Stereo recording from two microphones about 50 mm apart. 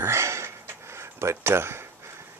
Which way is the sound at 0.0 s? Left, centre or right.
Right.